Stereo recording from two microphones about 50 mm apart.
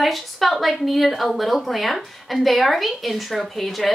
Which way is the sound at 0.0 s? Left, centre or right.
Centre.